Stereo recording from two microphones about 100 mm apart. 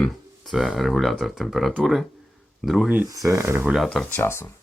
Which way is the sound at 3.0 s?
35° right (ahead or behind).